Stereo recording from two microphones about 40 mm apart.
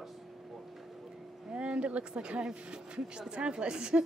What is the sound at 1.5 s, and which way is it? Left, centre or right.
Speech, right.